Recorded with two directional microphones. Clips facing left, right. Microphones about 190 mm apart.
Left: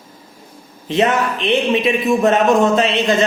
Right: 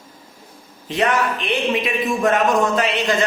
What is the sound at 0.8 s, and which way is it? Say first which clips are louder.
A man's voice: left 3 dB; 25° left (ahead or behind).